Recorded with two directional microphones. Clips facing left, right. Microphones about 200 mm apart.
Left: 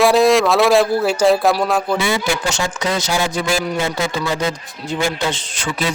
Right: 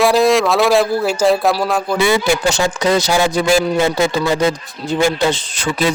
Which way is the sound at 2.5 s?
35° right (ahead or behind).